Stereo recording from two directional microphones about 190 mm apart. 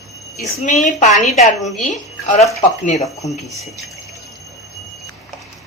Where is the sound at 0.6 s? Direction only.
40° left (ahead or behind).